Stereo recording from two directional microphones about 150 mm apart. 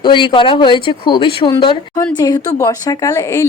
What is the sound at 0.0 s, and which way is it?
Speech, 30° left (ahead or behind).